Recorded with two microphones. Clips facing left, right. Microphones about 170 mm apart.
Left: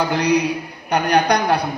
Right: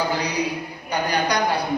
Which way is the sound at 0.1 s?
70° left (ahead or behind).